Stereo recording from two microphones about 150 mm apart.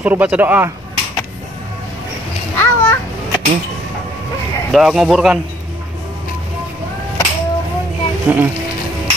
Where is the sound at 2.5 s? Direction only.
20° left (ahead or behind).